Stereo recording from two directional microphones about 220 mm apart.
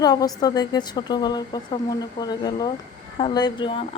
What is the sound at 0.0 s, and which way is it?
Speech, 15° left (ahead or behind).